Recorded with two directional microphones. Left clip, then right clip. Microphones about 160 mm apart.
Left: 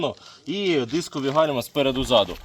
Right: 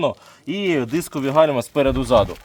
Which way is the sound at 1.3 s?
35° right (ahead or behind).